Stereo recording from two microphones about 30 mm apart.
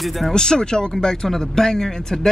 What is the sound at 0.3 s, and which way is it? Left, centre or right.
Speech, left.